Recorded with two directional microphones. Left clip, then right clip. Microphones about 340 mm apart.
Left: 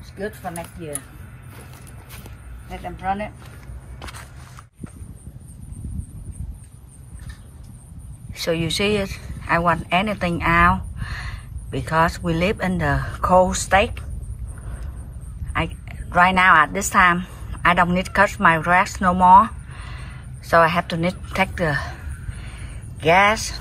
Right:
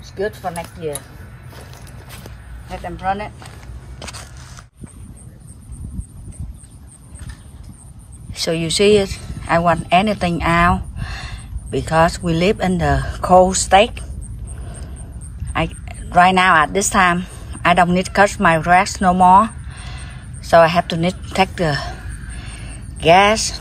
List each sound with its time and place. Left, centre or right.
0.2 s speech: centre
3.0 s speech: centre
4.0 s biting: centre
8.3 s speech: centre
15.5 s a woman's voice: centre
22.4 s a sound: centre